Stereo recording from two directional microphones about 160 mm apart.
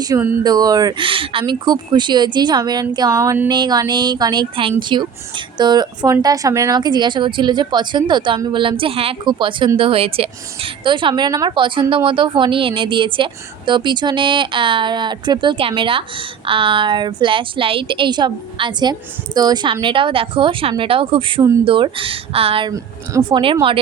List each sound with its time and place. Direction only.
0.1 s speech: 20° right (ahead or behind)